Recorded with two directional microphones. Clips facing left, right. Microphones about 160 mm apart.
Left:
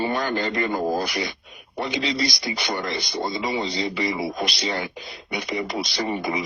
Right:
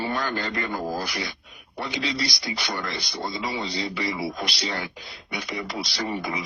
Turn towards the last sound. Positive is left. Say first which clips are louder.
# left 4 dB
turn(degrees=20)  # may be behind; listen again after turning